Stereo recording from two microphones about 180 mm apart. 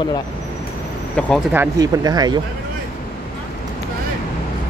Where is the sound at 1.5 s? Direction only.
20° right (ahead or behind).